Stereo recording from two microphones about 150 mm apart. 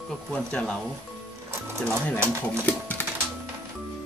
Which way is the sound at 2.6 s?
10° left (ahead or behind).